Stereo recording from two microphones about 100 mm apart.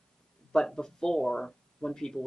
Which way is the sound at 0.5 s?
5° left (ahead or behind).